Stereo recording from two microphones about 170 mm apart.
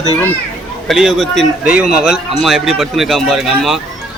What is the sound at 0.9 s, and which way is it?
A man's voice, centre (ahead or behind).